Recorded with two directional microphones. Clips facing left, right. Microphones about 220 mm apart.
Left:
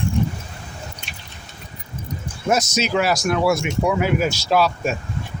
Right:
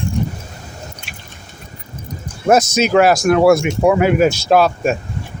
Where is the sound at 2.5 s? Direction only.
55° right (ahead or behind).